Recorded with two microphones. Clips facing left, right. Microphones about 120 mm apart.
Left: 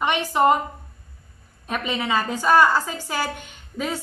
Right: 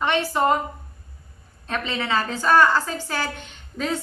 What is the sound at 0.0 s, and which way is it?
Speech, 15° left (ahead or behind).